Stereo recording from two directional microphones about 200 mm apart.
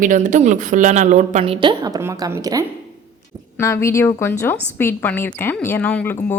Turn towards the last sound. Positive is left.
turn(degrees=10)  # may be behind; listen again after turning